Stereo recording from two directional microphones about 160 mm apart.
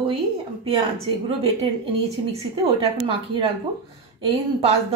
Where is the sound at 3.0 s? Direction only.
30° right (ahead or behind).